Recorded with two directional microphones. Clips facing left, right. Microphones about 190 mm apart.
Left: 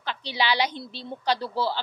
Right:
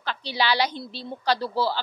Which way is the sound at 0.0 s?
20° left (ahead or behind).